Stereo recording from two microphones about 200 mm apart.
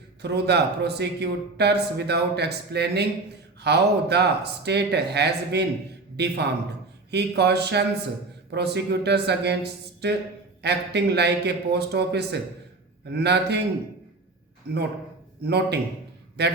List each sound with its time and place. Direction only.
0.2 s a man's voice: 55° right (ahead or behind)
15.4 s a man's voice: 55° right (ahead or behind)